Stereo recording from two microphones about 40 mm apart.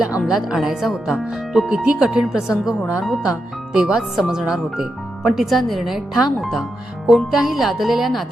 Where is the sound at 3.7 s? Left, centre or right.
Centre.